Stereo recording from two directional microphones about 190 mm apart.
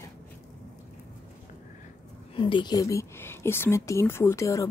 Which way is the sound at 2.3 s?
25° left (ahead or behind).